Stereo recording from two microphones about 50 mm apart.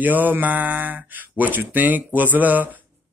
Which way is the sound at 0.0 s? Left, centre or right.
Right.